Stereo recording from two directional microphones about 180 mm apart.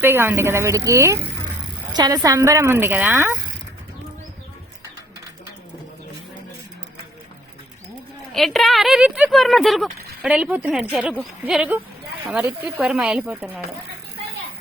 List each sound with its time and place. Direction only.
0.0 s speech: 15° right (ahead or behind)
8.3 s a woman's voice: centre (ahead or behind)